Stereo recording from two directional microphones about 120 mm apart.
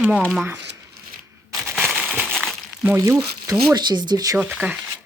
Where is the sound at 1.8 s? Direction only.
5° right (ahead or behind).